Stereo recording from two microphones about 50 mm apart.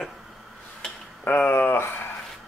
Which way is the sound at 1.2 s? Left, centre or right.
Left.